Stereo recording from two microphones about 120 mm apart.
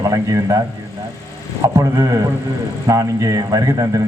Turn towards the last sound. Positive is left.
turn(degrees=-30)  # may be behind; listen again after turning